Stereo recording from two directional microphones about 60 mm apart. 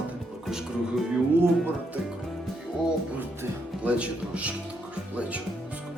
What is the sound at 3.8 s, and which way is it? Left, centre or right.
Speech, right.